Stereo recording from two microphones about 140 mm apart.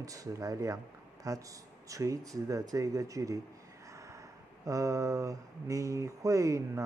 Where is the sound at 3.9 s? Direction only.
20° right (ahead or behind).